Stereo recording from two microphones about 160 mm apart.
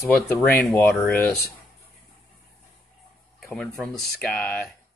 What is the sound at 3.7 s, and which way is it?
Speech, centre (ahead or behind).